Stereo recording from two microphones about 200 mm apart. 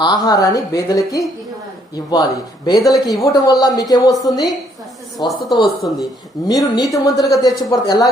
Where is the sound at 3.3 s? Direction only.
20° left (ahead or behind).